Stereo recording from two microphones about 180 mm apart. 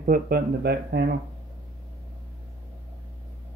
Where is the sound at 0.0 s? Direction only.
55° right (ahead or behind).